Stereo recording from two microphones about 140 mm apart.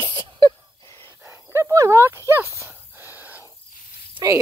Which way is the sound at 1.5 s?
20° right (ahead or behind).